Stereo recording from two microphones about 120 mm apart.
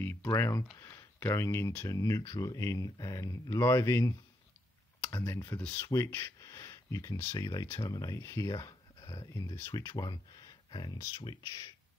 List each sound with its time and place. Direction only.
0.2 s speech: 25° left (ahead or behind)